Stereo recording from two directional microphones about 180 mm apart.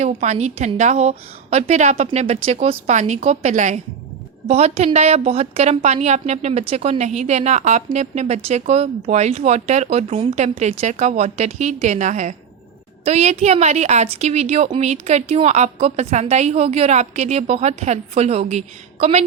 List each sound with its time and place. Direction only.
0.0 s a woman's voice: 40° right (ahead or behind)